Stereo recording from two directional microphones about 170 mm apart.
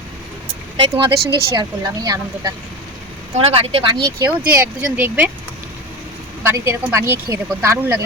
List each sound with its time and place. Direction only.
0.8 s a woman's voice: 30° right (ahead or behind)
3.3 s speech: 35° right (ahead or behind)
4.2 s speech: 15° right (ahead or behind)
6.4 s speech: 15° right (ahead or behind)